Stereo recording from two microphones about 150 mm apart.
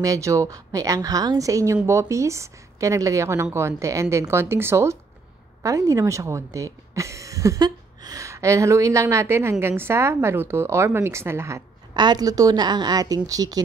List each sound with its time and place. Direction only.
0.0 s speech: 20° right (ahead or behind)